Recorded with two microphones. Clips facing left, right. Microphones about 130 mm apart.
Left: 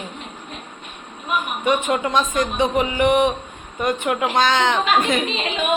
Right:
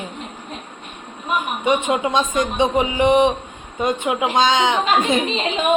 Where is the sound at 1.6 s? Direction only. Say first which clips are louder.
Right 1 dB; 15° right (ahead or behind).